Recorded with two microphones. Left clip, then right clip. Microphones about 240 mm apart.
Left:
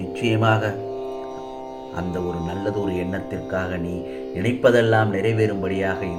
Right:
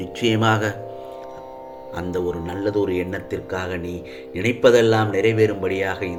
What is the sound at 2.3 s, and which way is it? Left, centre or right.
Speech, right.